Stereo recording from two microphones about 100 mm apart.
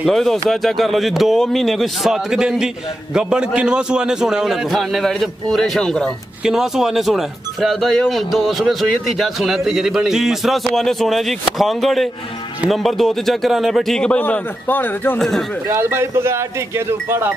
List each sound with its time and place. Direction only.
0.0 s speech: 5° left (ahead or behind)
6.4 s speech: 5° right (ahead or behind); by 15.1 s 20° left (ahead or behind)
15.1 s speech: 5° left (ahead or behind)
15.7 s speech: 25° right (ahead or behind)